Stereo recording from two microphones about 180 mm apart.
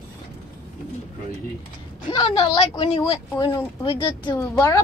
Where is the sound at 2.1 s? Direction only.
30° left (ahead or behind).